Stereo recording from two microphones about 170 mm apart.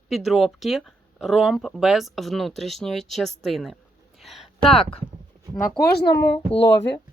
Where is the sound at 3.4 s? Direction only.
Centre (ahead or behind).